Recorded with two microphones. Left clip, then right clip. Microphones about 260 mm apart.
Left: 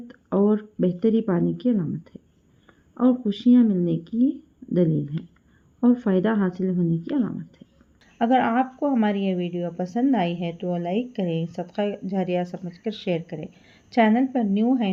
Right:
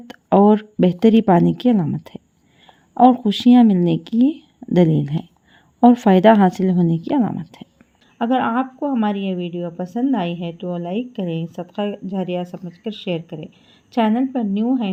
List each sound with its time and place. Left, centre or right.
0.1 s speech: right
8.2 s a woman's voice: centre